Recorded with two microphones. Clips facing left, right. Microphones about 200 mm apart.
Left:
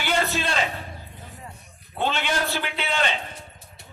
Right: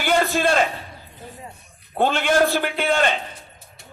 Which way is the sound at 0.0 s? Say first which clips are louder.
Right 6 dB; 50° right (ahead or behind).